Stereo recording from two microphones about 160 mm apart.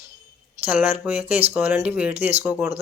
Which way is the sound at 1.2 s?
40° right (ahead or behind).